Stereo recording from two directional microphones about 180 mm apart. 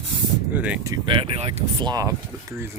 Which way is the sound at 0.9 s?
25° right (ahead or behind).